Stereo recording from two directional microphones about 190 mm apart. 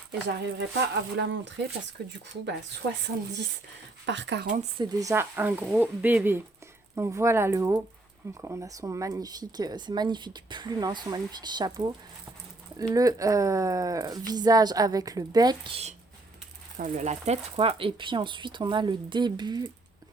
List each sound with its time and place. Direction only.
1.1 s speech: 70° right (ahead or behind)
4.8 s speech: 15° right (ahead or behind)